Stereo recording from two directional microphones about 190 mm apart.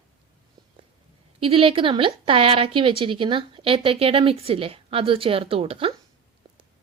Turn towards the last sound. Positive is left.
turn(degrees=-30)  # may be behind; listen again after turning